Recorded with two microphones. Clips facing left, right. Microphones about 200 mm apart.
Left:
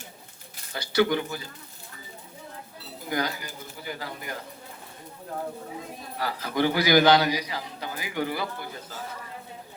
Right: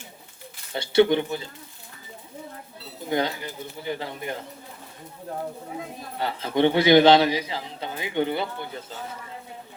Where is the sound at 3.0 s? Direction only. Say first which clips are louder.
Right 4 dB; 25° right (ahead or behind).